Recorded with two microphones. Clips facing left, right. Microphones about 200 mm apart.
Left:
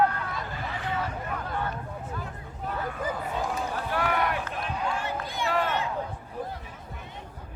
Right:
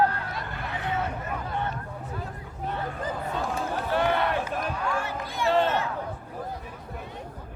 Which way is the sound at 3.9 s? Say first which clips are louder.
Right 3 dB; 25° right (ahead or behind).